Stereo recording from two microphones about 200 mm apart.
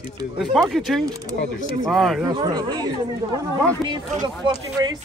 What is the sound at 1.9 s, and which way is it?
Speech, centre (ahead or behind).